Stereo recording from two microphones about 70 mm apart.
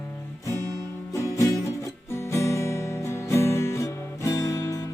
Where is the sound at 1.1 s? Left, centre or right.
Left.